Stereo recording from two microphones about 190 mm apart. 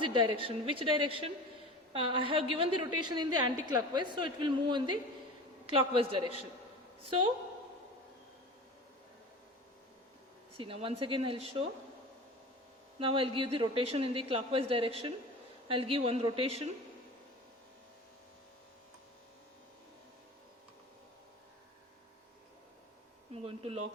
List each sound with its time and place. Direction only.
0.0 s a woman's voice: 25° right (ahead or behind)
10.6 s a woman's voice: 30° right (ahead or behind)
13.0 s a woman's voice: 30° right (ahead or behind)
23.3 s a woman's voice: 30° right (ahead or behind)